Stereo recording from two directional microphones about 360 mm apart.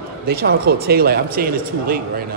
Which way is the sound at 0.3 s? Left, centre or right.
Right.